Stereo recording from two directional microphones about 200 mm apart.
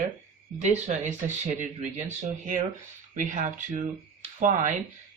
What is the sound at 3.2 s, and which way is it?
Speech, 40° right (ahead or behind).